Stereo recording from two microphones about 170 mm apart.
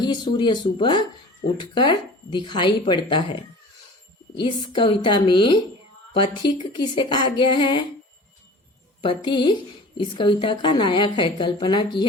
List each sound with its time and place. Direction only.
0.0 s a woman's voice: 25° left (ahead or behind)
4.4 s a woman's voice: 30° left (ahead or behind)
9.0 s a woman's voice: 30° left (ahead or behind)